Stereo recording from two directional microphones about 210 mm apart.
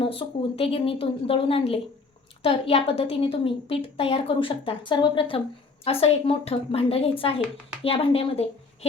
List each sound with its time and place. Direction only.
0.0 s a woman's voice: 25° left (ahead or behind)